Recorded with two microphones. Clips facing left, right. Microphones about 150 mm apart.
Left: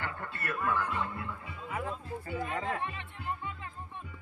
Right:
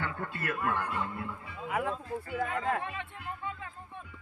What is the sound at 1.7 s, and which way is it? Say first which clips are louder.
Speech: right 4 dB; 65° right (ahead or behind).